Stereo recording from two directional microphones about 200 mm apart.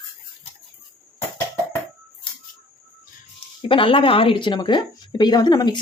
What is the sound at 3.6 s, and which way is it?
Speech, 25° left (ahead or behind).